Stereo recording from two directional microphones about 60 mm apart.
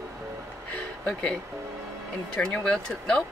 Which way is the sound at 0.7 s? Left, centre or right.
Left.